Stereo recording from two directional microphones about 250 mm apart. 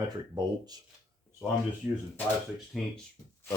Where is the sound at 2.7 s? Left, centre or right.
Centre.